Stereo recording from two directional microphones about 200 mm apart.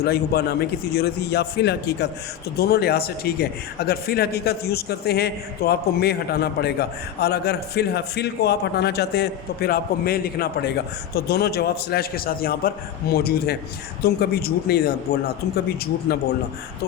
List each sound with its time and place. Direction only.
0.0 s a man's voice: 55° left (ahead or behind)